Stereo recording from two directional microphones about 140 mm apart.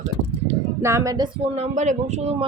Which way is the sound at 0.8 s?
20° right (ahead or behind).